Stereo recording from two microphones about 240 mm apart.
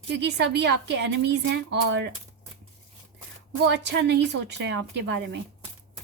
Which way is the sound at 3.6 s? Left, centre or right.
Right.